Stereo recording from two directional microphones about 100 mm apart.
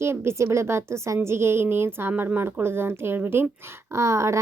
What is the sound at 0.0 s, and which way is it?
A woman's voice, 25° right (ahead or behind).